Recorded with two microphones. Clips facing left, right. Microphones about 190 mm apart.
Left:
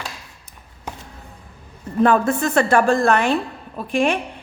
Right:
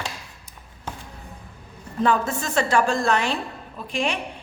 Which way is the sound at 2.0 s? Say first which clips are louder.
Left 4 dB; 60° left (ahead or behind).